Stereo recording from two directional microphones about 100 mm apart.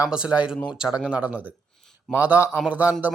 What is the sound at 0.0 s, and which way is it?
Speech, 10° right (ahead or behind).